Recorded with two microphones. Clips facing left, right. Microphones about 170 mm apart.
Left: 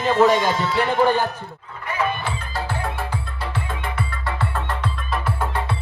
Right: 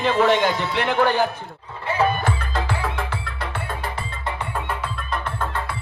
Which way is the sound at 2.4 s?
75° right (ahead or behind).